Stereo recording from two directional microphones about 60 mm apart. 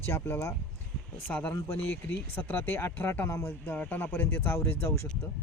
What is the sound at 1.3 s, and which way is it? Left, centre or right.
Speech, left.